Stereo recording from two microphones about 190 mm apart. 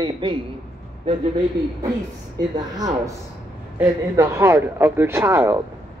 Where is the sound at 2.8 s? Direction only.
20° right (ahead or behind).